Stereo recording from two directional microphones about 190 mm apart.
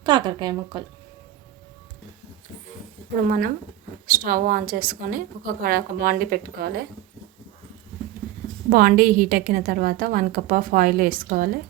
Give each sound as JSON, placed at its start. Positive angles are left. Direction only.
{"t": 0.0, "sound": "speech", "side_deg": -20}
{"t": 3.2, "sound": "a woman's voice", "side_deg": -45}
{"t": 8.7, "sound": "a woman's voice", "side_deg": -50}